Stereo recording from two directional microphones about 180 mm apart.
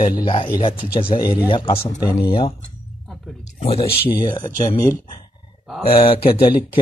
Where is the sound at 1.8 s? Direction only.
15° left (ahead or behind).